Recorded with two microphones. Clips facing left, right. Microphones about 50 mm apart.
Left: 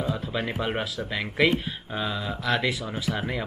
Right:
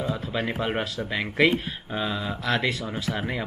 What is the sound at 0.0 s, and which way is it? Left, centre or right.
Speech, centre.